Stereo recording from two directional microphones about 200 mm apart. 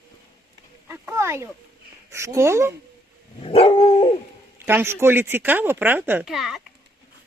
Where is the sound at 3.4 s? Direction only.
30° left (ahead or behind).